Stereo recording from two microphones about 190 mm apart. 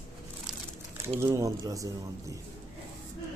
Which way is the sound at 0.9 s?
10° right (ahead or behind).